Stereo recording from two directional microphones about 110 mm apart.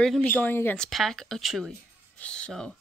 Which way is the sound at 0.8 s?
Centre (ahead or behind).